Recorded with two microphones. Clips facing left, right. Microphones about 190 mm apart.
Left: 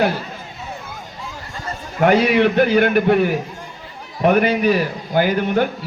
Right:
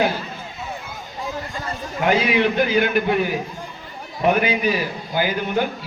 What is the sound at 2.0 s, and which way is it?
A man's voice, 65° left (ahead or behind).